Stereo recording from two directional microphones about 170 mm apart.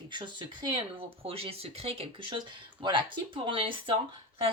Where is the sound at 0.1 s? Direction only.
25° right (ahead or behind).